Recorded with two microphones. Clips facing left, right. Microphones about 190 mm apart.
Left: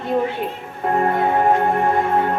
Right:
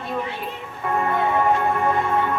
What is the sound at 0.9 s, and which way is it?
Music, 50° left (ahead or behind).